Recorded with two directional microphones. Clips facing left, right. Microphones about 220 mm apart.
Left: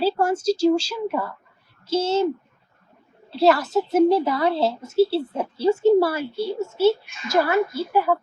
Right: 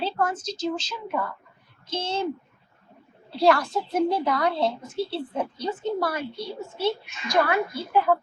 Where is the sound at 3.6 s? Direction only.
25° left (ahead or behind).